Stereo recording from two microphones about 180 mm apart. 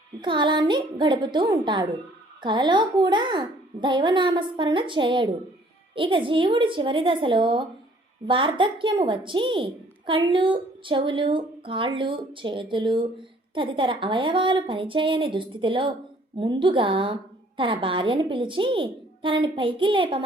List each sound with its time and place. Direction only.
0.2 s a woman's voice: 25° right (ahead or behind)